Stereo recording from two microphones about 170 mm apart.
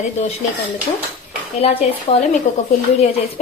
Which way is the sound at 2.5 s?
45° left (ahead or behind).